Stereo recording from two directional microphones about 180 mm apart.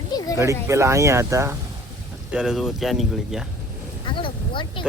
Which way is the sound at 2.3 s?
5° right (ahead or behind).